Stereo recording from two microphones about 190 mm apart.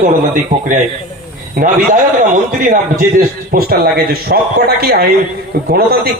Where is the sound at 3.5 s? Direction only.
55° right (ahead or behind).